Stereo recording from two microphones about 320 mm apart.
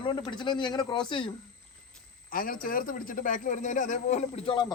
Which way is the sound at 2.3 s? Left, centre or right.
Left.